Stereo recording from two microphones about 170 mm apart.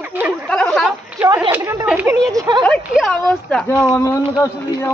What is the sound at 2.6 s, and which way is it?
Speech, 5° left (ahead or behind).